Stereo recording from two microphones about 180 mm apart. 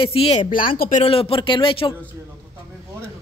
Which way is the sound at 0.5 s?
55° left (ahead or behind).